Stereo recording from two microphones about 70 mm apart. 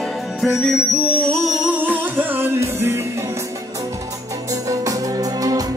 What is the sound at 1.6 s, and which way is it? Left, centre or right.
Music, right.